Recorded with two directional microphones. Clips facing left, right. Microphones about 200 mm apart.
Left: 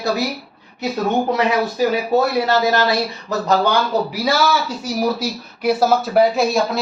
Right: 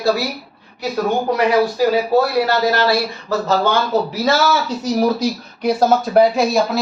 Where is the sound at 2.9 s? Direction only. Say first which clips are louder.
Right 2 dB; 15° left (ahead or behind).